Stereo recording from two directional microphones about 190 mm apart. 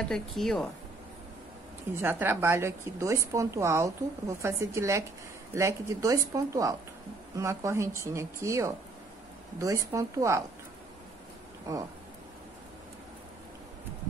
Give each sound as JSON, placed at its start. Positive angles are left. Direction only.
{"t": 0.0, "sound": "speech", "side_deg": 0}
{"t": 2.0, "sound": "a woman's voice", "side_deg": -10}
{"t": 11.7, "sound": "a woman's voice", "side_deg": -15}